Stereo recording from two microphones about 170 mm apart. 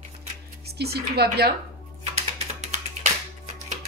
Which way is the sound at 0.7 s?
70° right (ahead or behind).